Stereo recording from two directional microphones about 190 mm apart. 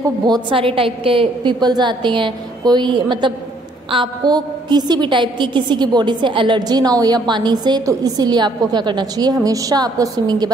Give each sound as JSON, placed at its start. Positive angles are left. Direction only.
{"t": 0.3, "sound": "a woman's voice", "side_deg": -25}